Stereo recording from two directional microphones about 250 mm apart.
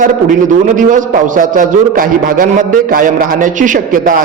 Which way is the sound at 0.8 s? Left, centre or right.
Right.